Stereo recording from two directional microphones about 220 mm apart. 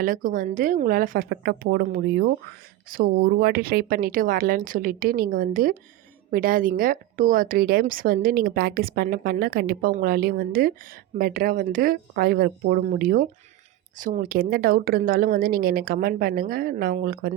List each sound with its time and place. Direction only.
0.0 s speech: 40° right (ahead or behind)